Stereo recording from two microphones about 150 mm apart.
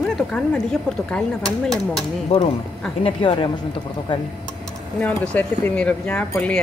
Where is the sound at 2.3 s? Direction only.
40° left (ahead or behind).